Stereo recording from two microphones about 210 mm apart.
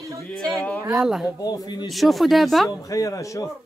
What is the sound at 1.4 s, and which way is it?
Speech, 20° left (ahead or behind).